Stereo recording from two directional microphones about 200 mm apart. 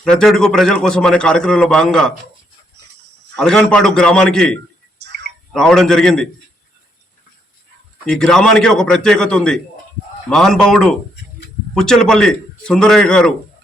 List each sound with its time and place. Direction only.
0.0 s a man's voice: 5° left (ahead or behind)
2.8 s a sound: 60° right (ahead or behind)
3.3 s a man's voice: 5° left (ahead or behind)
8.0 s a man's voice: 5° left (ahead or behind)